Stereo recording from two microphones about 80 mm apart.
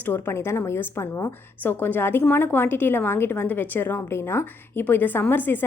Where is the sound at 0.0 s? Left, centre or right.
Left.